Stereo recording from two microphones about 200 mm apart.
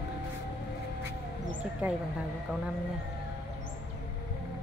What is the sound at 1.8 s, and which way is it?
Speech, 10° right (ahead or behind).